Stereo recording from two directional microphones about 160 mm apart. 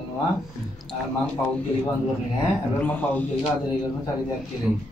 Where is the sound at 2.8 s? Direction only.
10° left (ahead or behind).